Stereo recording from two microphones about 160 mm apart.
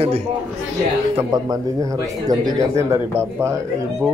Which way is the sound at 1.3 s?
25° right (ahead or behind).